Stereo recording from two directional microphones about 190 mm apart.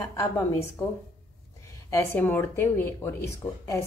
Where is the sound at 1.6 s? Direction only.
15° left (ahead or behind).